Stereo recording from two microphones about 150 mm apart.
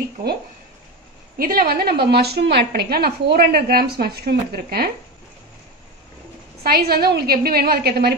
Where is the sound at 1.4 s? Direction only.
80° right.